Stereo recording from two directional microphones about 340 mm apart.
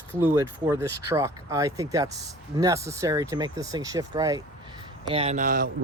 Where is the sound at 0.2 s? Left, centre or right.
Centre.